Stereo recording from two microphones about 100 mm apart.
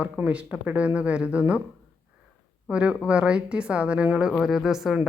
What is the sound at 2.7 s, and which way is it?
A woman's voice, 10° right (ahead or behind).